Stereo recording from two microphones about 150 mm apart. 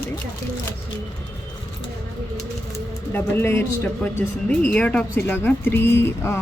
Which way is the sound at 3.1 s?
15° left (ahead or behind).